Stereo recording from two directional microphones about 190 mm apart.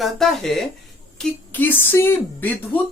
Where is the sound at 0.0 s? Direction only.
Centre (ahead or behind).